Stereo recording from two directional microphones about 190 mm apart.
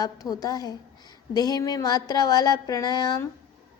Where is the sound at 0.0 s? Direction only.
20° left (ahead or behind).